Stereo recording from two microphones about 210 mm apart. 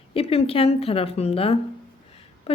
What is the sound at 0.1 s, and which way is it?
Speech, 25° left (ahead or behind).